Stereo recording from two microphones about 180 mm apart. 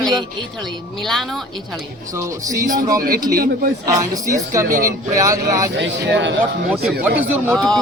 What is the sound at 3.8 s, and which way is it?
A woman's voice, 20° right (ahead or behind).